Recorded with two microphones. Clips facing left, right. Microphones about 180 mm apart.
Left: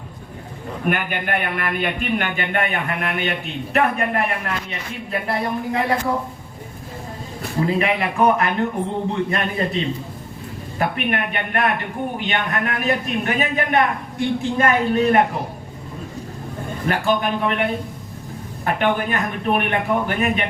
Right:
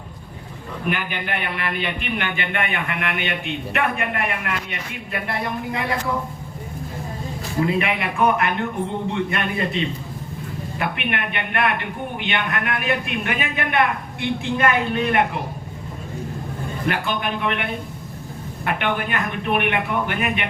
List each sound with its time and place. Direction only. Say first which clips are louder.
0.9 s a man's voice: left 3 dB; 50° left (ahead or behind)
7.8 s a man's voice: left 2 dB; 35° left (ahead or behind)
16.8 s a man's voice: left 4 dB; 40° left (ahead or behind)